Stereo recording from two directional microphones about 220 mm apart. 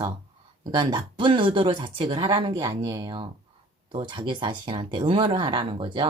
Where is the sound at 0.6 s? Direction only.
20° right (ahead or behind).